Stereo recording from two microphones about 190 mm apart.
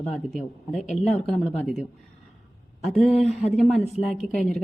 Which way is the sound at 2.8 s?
Centre (ahead or behind).